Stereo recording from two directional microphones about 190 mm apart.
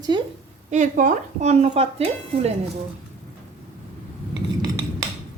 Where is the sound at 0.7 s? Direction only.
45° right (ahead or behind).